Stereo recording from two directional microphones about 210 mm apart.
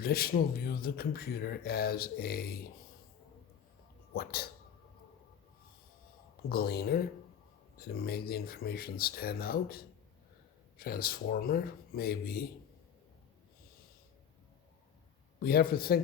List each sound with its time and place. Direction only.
0.0 s speech: 45° left (ahead or behind)
4.1 s speech: 45° left (ahead or behind)
6.5 s speech: 45° left (ahead or behind)
15.4 s speech: 45° left (ahead or behind)